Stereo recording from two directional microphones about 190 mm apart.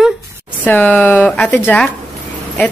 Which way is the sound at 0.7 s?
5° left (ahead or behind).